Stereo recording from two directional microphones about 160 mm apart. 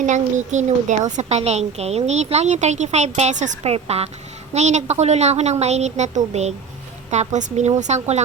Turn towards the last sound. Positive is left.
turn(degrees=-45)  # may be behind; listen again after turning